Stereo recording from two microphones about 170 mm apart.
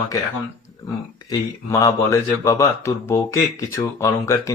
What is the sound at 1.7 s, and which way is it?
Speech, 20° left (ahead or behind).